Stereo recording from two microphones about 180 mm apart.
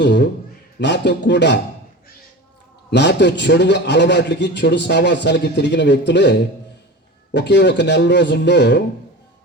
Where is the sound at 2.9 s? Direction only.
75° left (ahead or behind).